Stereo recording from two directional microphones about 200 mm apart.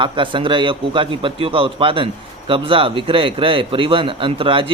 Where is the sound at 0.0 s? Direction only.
25° right (ahead or behind).